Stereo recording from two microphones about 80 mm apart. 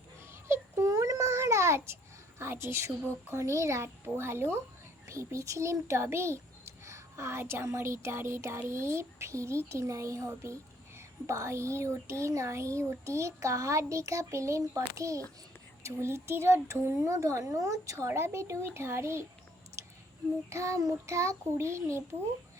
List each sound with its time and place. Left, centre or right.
0.3 s a sound: right
0.9 s child singing: right
2.4 s a child's voice: right
3.8 s a child's voice: right
19.8 s a sound: right
20.5 s a child's voice: right